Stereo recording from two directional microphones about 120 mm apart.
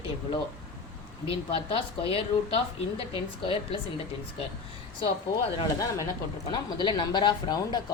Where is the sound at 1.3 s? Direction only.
50° left (ahead or behind).